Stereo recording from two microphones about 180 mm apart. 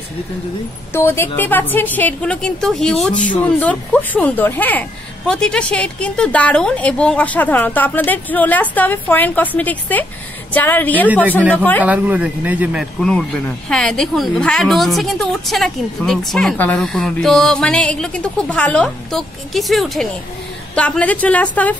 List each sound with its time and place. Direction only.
0.9 s a woman's voice: 15° left (ahead or behind)
11.8 s speech: 10° right (ahead or behind)
13.0 s a woman's voice: 5° left (ahead or behind)